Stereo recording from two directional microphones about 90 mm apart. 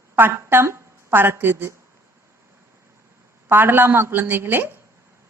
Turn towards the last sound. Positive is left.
turn(degrees=-25)  # may be behind; listen again after turning